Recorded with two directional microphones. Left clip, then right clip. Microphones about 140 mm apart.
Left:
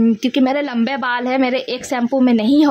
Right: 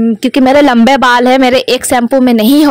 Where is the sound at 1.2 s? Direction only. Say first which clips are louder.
Right 11 dB; 45° right (ahead or behind).